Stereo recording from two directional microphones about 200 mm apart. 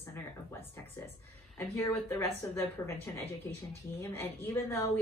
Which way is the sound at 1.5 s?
15° left (ahead or behind).